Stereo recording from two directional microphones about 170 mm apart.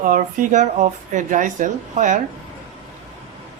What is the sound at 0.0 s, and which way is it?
Speech, 50° right (ahead or behind).